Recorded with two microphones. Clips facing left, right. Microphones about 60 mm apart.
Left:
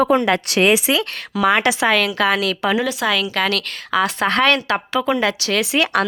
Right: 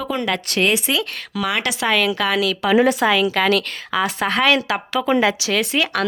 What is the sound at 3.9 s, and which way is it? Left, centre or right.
Speech, centre.